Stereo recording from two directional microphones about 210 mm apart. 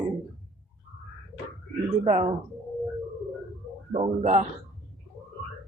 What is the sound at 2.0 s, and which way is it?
Speech, 30° right (ahead or behind).